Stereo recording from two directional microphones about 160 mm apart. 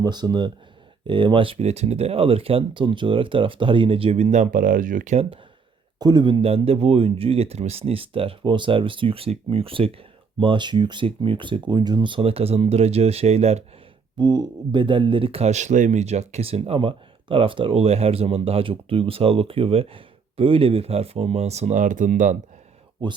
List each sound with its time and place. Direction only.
0.0 s speech: 25° right (ahead or behind); by 5.4 s 45° right (ahead or behind)
6.0 s speech: 25° right (ahead or behind); by 13.7 s 40° right (ahead or behind)
14.2 s speech: 25° right (ahead or behind); by 22.4 s 55° right (ahead or behind)